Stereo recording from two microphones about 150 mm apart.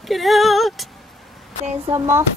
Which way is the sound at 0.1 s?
Centre (ahead or behind).